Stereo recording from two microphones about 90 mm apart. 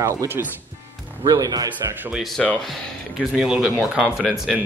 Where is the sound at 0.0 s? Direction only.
35° right (ahead or behind).